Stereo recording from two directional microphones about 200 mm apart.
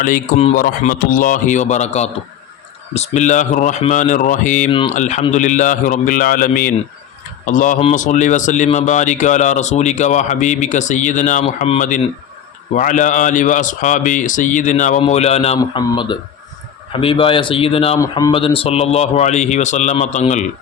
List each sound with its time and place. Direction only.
0.0 s a man's voice: 35° left (ahead or behind)